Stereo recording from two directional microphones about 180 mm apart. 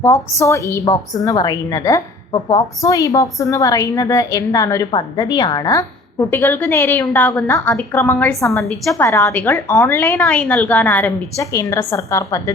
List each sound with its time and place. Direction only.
0.0 s a woman's voice: 15° left (ahead or behind)
8.6 s a woman's voice: centre (ahead or behind)
9.0 s a woman's voice: 15° left (ahead or behind)